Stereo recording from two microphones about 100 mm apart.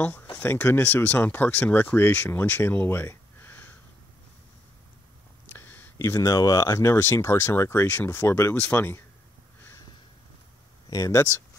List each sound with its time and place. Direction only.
0.0 s speech: 20° left (ahead or behind)
5.5 s speech: 20° left (ahead or behind)
10.9 s speech: 35° left (ahead or behind)